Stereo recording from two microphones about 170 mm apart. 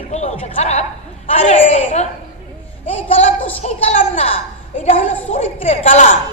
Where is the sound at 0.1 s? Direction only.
40° left (ahead or behind).